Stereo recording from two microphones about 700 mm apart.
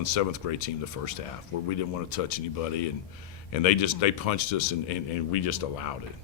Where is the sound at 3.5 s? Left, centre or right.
Left.